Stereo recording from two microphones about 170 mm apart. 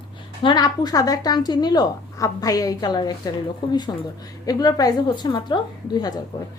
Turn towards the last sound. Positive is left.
turn(degrees=25)  # may be behind; listen again after turning